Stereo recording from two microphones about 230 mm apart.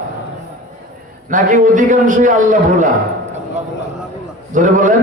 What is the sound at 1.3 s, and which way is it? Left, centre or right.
A man's voice, right.